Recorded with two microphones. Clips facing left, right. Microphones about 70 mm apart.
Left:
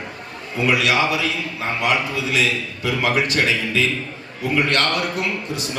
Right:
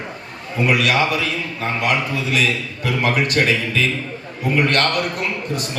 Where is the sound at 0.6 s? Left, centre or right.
Right.